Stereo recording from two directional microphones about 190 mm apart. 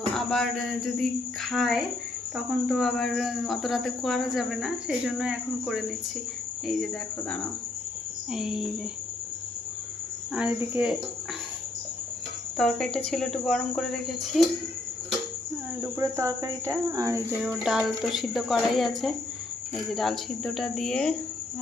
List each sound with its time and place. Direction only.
0.3 s speech: centre (ahead or behind)
10.3 s speech: 5° right (ahead or behind)
12.5 s speech: 5° left (ahead or behind)
15.8 s speech: 15° right (ahead or behind)
17.5 s speech: 5° right (ahead or behind)